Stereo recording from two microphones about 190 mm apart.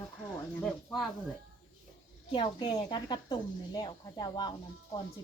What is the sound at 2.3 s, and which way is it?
Speech, 25° left (ahead or behind).